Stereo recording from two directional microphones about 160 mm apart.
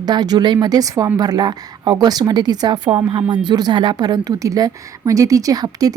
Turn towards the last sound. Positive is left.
turn(degrees=-25)  # may be behind; listen again after turning